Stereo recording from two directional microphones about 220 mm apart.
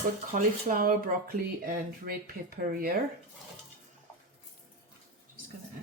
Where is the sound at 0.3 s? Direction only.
40° right (ahead or behind).